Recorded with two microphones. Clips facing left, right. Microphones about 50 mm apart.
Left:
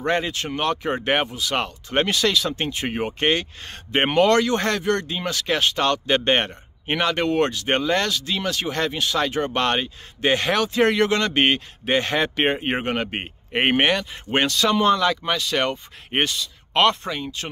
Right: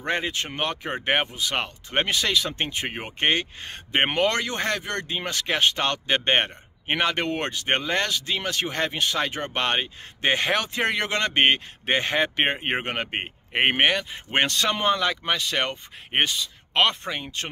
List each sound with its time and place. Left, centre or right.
0.0 s speech: centre
14.5 s speech: right
14.9 s speech: right